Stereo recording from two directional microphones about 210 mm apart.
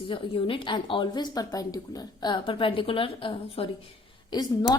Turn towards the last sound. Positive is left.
turn(degrees=20)  # may be behind; listen again after turning